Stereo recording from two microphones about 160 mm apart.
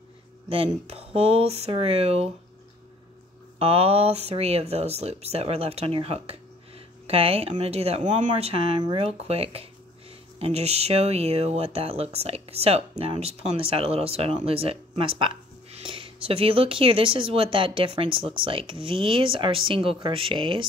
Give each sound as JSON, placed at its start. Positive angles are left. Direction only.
{"t": 0.5, "sound": "speech", "side_deg": -40}
{"t": 3.5, "sound": "speech", "side_deg": -40}